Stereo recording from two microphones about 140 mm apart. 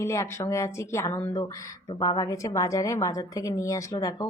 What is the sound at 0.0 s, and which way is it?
Speech, 20° left (ahead or behind).